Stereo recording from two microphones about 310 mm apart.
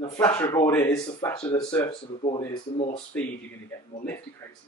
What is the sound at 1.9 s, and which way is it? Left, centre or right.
Speech, centre.